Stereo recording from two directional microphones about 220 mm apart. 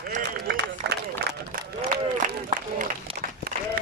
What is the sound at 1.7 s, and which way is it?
Run, 35° right (ahead or behind).